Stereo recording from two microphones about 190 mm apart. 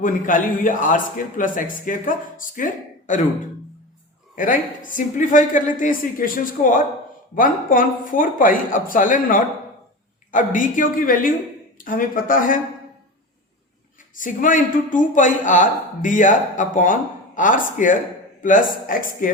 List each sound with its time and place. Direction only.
0.0 s speech: 45° left (ahead or behind)
4.4 s speech: 45° left (ahead or behind)
14.2 s speech: 45° left (ahead or behind)